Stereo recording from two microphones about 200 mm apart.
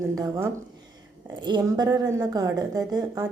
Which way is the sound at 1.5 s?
20° right (ahead or behind).